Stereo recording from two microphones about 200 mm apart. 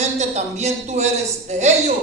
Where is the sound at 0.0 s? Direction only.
35° right (ahead or behind).